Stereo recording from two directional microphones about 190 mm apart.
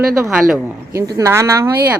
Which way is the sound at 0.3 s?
15° right (ahead or behind).